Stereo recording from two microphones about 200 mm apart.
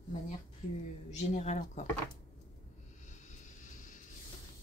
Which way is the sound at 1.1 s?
35° left (ahead or behind).